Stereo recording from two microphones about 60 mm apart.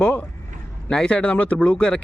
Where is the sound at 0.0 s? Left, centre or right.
Left.